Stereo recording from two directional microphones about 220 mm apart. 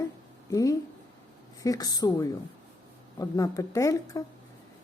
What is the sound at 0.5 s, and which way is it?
Speech, 15° left (ahead or behind).